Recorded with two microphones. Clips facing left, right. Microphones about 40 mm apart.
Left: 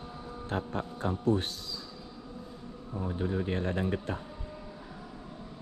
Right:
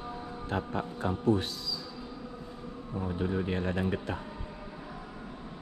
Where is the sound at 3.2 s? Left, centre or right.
Right.